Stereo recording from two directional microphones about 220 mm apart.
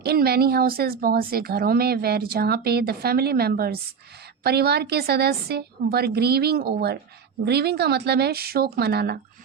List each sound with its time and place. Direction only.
0.0 s speech: 45° right (ahead or behind)